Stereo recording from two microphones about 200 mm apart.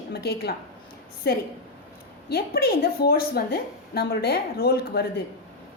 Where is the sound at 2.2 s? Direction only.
50° left (ahead or behind).